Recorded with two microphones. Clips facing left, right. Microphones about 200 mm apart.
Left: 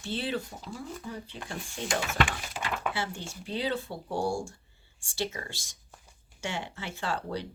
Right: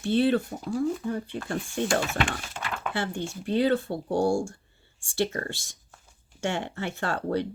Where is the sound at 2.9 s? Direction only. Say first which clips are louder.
Right 5 dB; 55° right (ahead or behind).